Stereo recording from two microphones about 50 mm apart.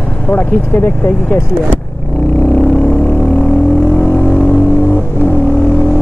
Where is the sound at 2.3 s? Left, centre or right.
Left.